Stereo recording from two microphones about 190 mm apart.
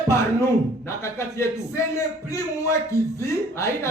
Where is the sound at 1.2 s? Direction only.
15° left (ahead or behind).